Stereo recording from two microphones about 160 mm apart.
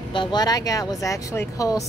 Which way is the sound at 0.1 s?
30° left (ahead or behind).